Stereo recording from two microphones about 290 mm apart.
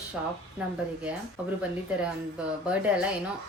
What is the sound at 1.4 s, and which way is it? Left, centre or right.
Speech, centre.